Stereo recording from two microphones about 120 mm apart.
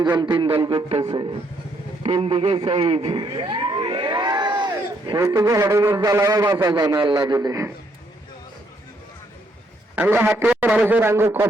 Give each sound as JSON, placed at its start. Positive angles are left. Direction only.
{"t": 0.3, "sound": "a man's voice", "side_deg": -45}
{"t": 6.7, "sound": "a man's voice", "side_deg": -35}
{"t": 9.9, "sound": "a man's voice", "side_deg": -15}